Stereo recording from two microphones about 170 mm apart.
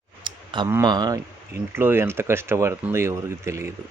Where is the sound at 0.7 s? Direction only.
20° right (ahead or behind).